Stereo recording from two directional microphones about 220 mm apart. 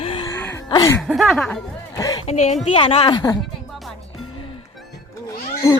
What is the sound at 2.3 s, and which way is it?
A woman's voice, 30° left (ahead or behind).